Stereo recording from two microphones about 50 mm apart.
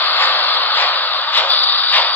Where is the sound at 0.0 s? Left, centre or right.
Left.